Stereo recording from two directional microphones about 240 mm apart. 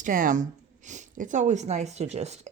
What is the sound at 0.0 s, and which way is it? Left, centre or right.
Speech, right.